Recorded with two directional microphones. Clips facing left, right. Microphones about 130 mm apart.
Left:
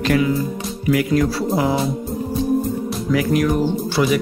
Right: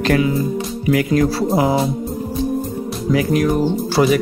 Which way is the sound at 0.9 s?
30° right (ahead or behind).